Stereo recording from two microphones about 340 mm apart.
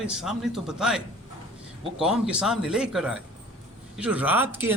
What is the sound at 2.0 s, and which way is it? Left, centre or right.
Speech, centre.